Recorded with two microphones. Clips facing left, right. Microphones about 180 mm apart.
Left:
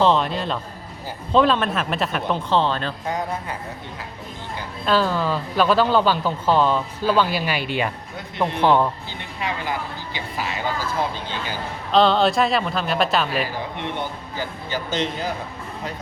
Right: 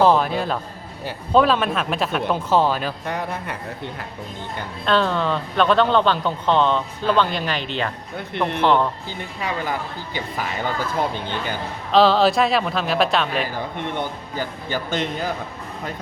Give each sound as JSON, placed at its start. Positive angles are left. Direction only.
{"t": 0.0, "sound": "speech", "side_deg": -5}
{"t": 3.1, "sound": "speech", "side_deg": -65}
{"t": 4.9, "sound": "a man's voice", "side_deg": 5}
{"t": 9.4, "sound": "speech", "side_deg": -50}
{"t": 11.9, "sound": "speech", "side_deg": 0}
{"t": 14.3, "sound": "speech", "side_deg": -50}